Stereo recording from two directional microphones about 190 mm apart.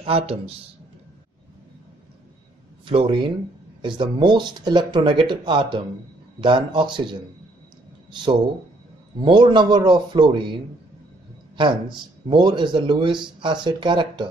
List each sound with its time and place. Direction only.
0.0 s speech: 30° right (ahead or behind)
2.8 s a man's voice: 25° right (ahead or behind)
12.3 s speech: 25° right (ahead or behind)